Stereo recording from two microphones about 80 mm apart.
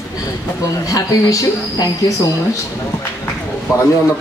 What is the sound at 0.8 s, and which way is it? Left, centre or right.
A man's voice, left.